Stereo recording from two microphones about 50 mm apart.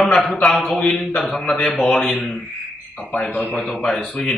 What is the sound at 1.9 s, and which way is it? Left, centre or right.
A man's voice, left.